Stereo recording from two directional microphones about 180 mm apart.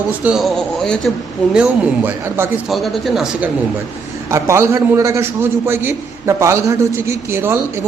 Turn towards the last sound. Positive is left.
turn(degrees=-15)  # may be behind; listen again after turning